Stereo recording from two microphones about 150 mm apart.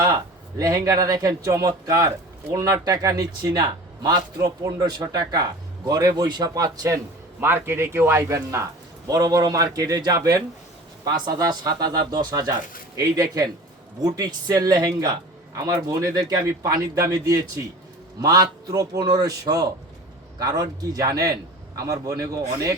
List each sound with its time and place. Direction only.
0.6 s speech: 25° right (ahead or behind)